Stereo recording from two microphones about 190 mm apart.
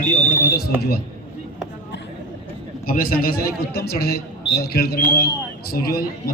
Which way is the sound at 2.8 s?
50° left (ahead or behind).